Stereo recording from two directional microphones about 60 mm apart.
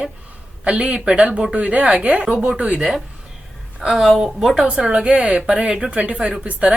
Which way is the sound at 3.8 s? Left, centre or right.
Centre.